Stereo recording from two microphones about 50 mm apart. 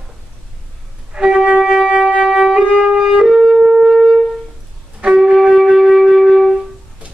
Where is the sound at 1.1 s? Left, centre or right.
Centre.